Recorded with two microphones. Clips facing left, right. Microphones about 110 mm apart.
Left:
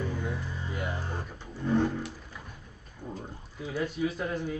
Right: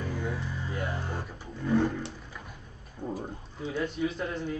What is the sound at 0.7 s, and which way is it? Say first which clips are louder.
Music: right 1 dB; 15° left (ahead or behind).